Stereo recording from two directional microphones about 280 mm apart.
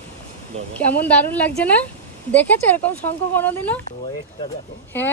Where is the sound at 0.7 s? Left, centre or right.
Centre.